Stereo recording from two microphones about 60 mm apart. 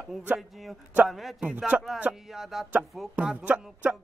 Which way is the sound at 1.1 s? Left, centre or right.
Centre.